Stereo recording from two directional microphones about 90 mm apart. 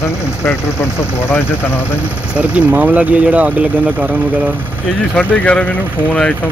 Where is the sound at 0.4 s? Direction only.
25° left (ahead or behind).